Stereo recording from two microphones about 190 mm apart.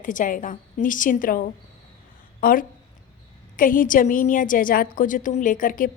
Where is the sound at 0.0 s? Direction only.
45° left (ahead or behind).